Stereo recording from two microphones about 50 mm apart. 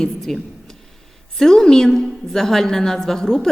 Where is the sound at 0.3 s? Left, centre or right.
Centre.